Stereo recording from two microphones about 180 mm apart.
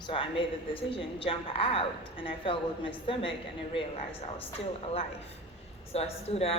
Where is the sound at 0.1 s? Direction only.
30° left (ahead or behind).